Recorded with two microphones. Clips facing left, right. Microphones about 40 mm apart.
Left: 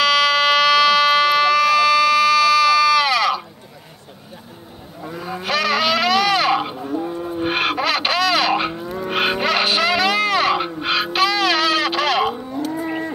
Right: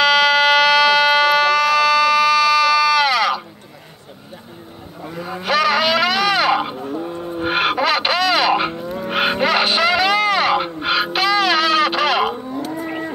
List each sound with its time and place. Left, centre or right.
0.0 s siren: centre
5.2 s a sound: centre
7.3 s wild animals: centre